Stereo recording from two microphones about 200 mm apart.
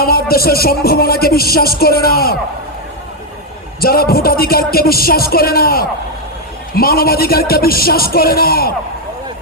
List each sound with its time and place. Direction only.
0.0 s speech: 50° left (ahead or behind)
3.8 s speech: 50° left (ahead or behind)